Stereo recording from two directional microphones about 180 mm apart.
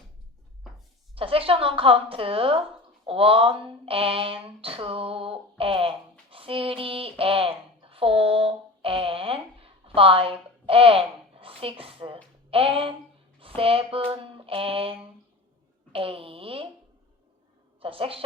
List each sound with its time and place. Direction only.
1.1 s speech: 30° right (ahead or behind)
17.7 s a woman's voice: 30° right (ahead or behind)